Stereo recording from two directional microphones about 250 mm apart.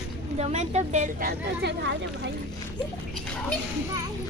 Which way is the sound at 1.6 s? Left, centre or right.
Right.